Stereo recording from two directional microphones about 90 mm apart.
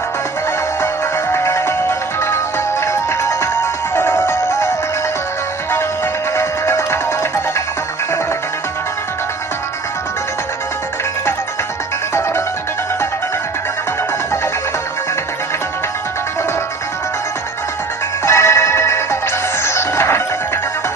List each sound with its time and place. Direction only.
1.3 s music: 30° left (ahead or behind)
6.3 s music: 30° left (ahead or behind)
12.1 s music: 30° left (ahead or behind)
18.2 s music: 30° left (ahead or behind)